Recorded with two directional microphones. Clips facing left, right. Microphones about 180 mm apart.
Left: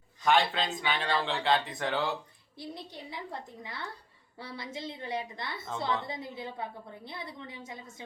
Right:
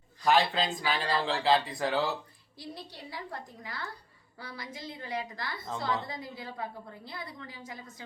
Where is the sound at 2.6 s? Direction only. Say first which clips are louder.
Left 2 dB; 20° left (ahead or behind).